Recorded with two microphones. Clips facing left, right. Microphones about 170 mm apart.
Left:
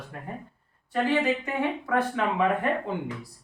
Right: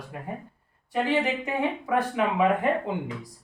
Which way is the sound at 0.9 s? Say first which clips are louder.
Left 1 dB; 15° right (ahead or behind).